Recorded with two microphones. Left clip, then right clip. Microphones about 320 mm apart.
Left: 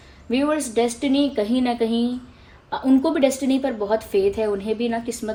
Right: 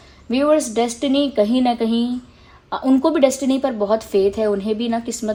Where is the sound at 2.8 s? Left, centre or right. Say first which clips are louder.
Right 2 dB; centre.